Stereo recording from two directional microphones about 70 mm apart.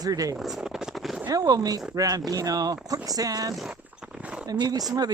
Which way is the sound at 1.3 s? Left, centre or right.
Right.